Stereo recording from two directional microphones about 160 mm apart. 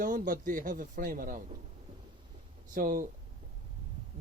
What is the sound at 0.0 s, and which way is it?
Speech, 60° right (ahead or behind).